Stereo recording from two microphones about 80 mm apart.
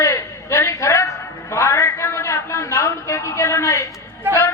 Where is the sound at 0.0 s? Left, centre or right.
Left.